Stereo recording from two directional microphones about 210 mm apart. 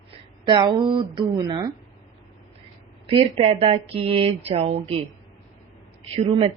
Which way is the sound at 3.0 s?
25° right (ahead or behind).